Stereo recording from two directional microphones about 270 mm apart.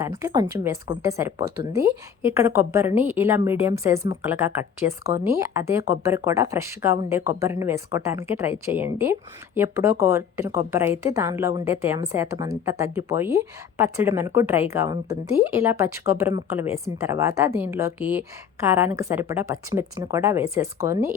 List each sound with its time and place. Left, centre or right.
0.0 s speech: centre